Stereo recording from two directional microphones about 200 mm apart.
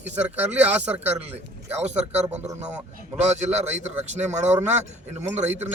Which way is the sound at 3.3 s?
35° right (ahead or behind).